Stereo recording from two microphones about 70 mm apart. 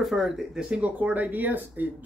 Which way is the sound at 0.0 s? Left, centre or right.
Centre.